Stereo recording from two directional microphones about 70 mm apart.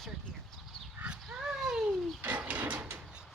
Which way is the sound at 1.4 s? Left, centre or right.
Centre.